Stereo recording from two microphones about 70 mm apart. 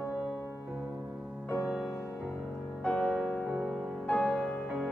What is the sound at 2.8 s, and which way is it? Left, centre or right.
Music, centre.